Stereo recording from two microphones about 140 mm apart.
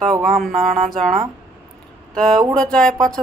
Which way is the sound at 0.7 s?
70° right (ahead or behind).